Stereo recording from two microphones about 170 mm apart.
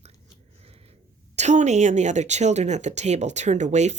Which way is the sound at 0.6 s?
35° right (ahead or behind).